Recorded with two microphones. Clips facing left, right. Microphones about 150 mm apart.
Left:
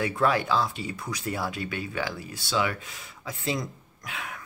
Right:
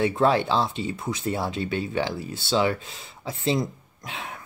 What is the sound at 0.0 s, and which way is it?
Speech, 25° right (ahead or behind).